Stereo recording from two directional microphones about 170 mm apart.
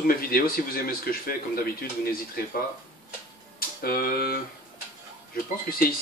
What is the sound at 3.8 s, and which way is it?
Speech, 60° left (ahead or behind).